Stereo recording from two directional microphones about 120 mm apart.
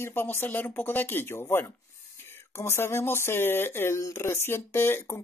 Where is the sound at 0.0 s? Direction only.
20° left (ahead or behind).